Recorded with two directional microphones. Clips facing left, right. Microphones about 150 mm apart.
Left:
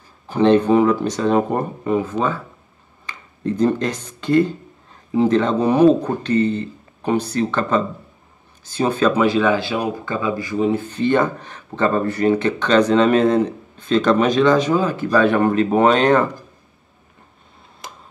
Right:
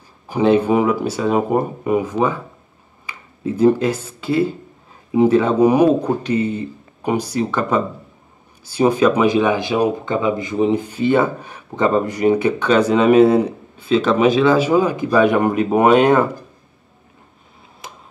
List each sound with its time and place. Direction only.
0.3 s speech: 10° right (ahead or behind)
17.8 s tick-tock: centre (ahead or behind)